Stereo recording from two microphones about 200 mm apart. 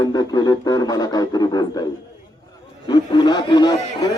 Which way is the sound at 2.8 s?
20° left (ahead or behind).